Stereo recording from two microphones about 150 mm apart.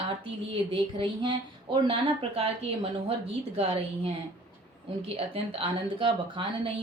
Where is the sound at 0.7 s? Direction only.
35° right (ahead or behind).